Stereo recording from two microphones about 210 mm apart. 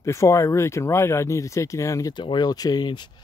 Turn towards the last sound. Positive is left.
turn(degrees=20)  # may be behind; listen again after turning